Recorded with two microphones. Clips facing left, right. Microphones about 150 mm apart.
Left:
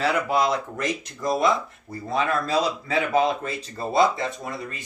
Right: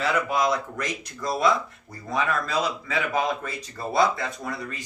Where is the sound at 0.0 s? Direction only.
30° left (ahead or behind).